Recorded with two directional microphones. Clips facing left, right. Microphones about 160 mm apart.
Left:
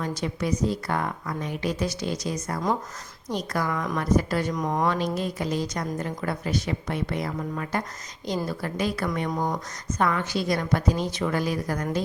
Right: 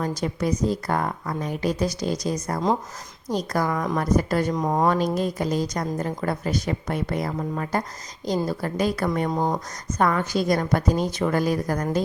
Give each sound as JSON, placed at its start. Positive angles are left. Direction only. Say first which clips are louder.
{"t": 0.0, "sound": "a woman's voice", "louder": "right 3 dB", "side_deg": -40}
{"t": 4.5, "sound": "a woman's voice", "louder": "right 3 dB", "side_deg": -25}
{"t": 4.9, "sound": "a woman's voice", "louder": "right 4 dB", "side_deg": -40}
{"t": 9.3, "sound": "a woman's voice", "louder": "right 3 dB", "side_deg": -25}
{"t": 10.0, "sound": "a woman's voice", "louder": "right 3 dB", "side_deg": -40}